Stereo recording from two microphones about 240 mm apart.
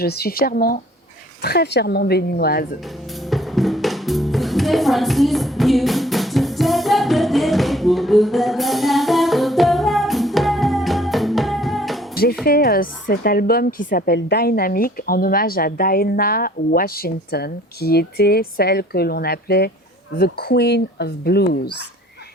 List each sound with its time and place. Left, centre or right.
0.0 s a woman's voice: left
3.2 s music: centre
12.1 s dishes: left
12.5 s a woman's voice: left